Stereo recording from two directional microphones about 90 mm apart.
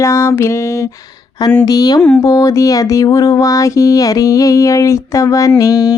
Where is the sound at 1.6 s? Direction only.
45° left (ahead or behind).